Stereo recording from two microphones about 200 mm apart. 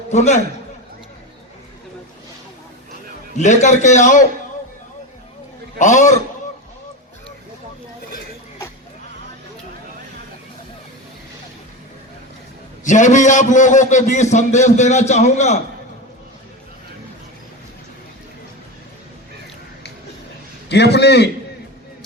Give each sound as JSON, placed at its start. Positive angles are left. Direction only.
{"t": 0.1, "sound": "a man's voice", "side_deg": 35}
{"t": 3.3, "sound": "a man's voice", "side_deg": 35}
{"t": 5.8, "sound": "a man's voice", "side_deg": 40}
{"t": 12.8, "sound": "a man's voice", "side_deg": 40}
{"t": 20.7, "sound": "a man's voice", "side_deg": 55}